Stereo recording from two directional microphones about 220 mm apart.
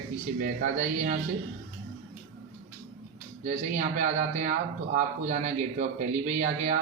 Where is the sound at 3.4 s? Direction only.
35° right (ahead or behind).